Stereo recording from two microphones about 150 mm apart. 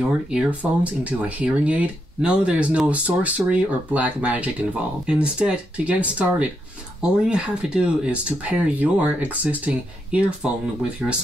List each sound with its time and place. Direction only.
0.0 s speech: 5° right (ahead or behind)